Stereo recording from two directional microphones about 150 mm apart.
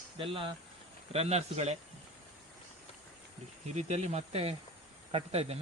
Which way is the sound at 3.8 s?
50° right (ahead or behind).